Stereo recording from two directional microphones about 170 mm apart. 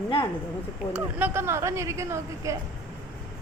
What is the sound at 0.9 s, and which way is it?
A woman's voice, 10° right (ahead or behind).